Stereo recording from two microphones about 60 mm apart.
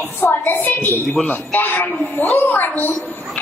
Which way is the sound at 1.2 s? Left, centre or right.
Left.